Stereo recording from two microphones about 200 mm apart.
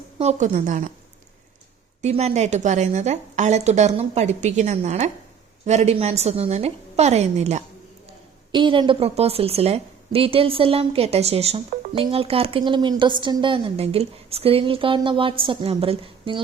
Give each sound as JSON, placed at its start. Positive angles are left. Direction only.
{"t": 0.2, "sound": "a woman's voice", "side_deg": -35}
{"t": 2.0, "sound": "a woman's voice", "side_deg": -35}
{"t": 8.5, "sound": "a woman's voice", "side_deg": -25}